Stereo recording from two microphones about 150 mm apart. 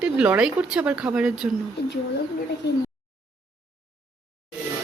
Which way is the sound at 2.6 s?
90° left.